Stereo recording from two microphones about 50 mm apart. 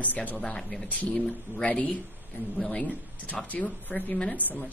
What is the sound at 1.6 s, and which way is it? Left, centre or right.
Speech, left.